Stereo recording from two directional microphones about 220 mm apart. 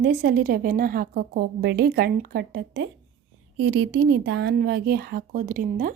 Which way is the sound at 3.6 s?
60° right (ahead or behind).